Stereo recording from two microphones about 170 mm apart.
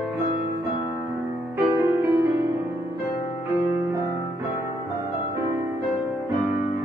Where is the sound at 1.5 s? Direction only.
15° right (ahead or behind).